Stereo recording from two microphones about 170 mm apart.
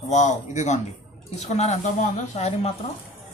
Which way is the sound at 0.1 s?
45° left (ahead or behind).